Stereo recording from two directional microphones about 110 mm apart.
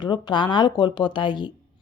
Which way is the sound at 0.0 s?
45° left (ahead or behind).